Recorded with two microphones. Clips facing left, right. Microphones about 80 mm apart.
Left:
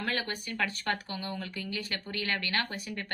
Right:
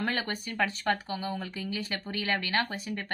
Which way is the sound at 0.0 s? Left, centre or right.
Right.